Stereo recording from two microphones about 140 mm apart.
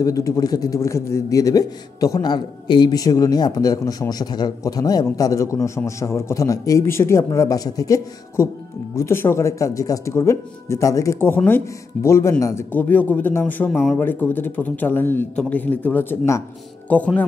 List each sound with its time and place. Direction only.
0.0 s a man's voice: 25° left (ahead or behind); by 17.2 s 10° left (ahead or behind)